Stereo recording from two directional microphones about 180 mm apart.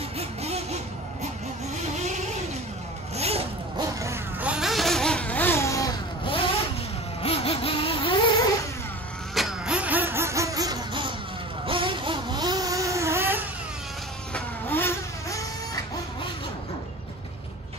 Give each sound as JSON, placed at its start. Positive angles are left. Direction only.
{"t": 0.2, "sound": "vehicle", "side_deg": -35}
{"t": 2.0, "sound": "vehicle", "side_deg": -40}
{"t": 3.2, "sound": "zipper", "side_deg": -35}
{"t": 4.0, "sound": "a sound", "side_deg": -10}
{"t": 7.2, "sound": "vehicle", "side_deg": 30}
{"t": 9.3, "sound": "vehicle", "side_deg": -5}
{"t": 14.3, "sound": "vehicle", "side_deg": 10}